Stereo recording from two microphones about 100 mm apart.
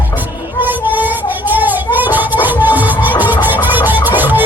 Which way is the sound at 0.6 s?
20° right (ahead or behind).